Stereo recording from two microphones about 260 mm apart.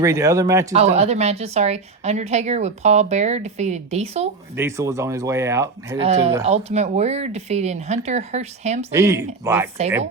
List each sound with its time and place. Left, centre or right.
0.0 s speech: centre
0.7 s a woman's voice: right
4.5 s speech: centre
6.0 s a woman's voice: right
8.9 s speech: centre